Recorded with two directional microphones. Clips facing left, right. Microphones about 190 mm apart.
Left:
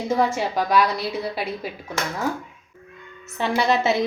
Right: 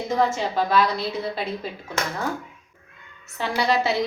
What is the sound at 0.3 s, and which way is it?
A woman's voice, 15° left (ahead or behind).